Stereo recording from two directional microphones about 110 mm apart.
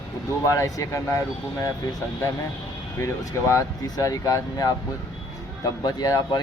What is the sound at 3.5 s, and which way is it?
Speech, 30° left (ahead or behind).